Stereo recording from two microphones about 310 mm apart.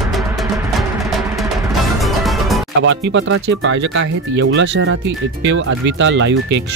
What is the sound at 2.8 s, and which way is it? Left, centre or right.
Speech, right.